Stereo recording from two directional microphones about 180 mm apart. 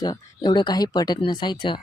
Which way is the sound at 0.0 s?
25° left (ahead or behind).